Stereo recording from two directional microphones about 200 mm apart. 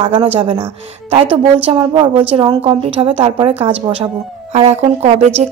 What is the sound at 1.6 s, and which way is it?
A woman's voice, 25° right (ahead or behind).